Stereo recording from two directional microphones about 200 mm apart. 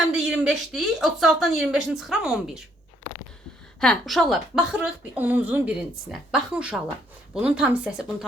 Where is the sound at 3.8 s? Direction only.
Centre (ahead or behind).